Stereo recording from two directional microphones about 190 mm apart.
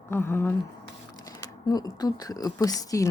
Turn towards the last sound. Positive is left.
turn(degrees=20)  # may be behind; listen again after turning